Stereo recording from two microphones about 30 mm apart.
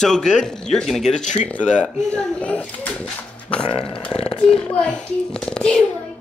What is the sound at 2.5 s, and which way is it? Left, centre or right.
Speech, left.